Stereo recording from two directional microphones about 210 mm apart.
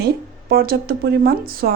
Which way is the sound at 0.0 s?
45° right (ahead or behind).